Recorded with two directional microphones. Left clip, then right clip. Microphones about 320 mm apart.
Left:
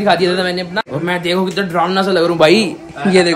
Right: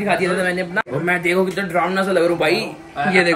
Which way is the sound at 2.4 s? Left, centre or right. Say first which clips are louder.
Left 8 dB; left.